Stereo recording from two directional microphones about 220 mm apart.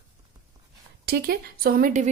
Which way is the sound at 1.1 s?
45° right (ahead or behind).